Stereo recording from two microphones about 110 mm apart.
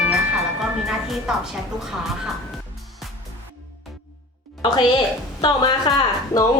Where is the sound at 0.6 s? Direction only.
5° right (ahead or behind).